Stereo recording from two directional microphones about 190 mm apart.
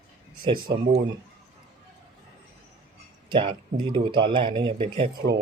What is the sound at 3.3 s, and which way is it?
Speech, 25° right (ahead or behind).